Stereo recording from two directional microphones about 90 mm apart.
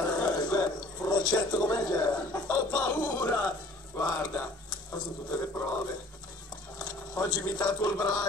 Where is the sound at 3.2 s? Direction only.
25° left (ahead or behind).